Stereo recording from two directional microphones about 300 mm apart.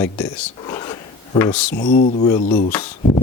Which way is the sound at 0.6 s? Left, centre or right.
Centre.